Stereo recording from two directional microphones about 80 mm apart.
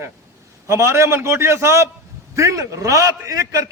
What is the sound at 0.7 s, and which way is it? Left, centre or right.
A man's voice, right.